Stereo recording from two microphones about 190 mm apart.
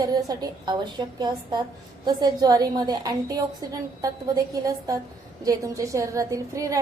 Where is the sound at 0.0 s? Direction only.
20° right (ahead or behind).